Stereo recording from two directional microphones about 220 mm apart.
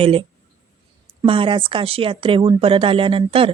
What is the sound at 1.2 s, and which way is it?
Speech, 25° right (ahead or behind).